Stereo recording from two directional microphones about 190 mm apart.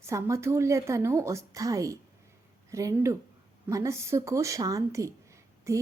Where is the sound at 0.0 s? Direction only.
15° right (ahead or behind).